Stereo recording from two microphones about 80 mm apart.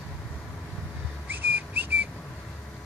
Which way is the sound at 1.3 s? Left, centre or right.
Right.